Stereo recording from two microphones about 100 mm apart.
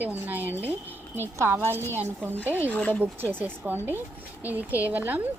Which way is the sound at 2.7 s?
15° left (ahead or behind).